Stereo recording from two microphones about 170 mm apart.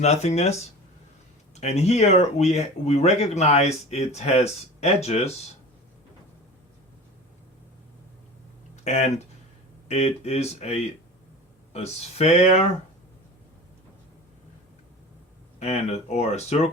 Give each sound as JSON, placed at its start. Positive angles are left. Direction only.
{"t": 0.0, "sound": "speech", "side_deg": 40}
{"t": 1.5, "sound": "speech", "side_deg": 40}
{"t": 8.7, "sound": "speech", "side_deg": 40}
{"t": 15.5, "sound": "speech", "side_deg": 40}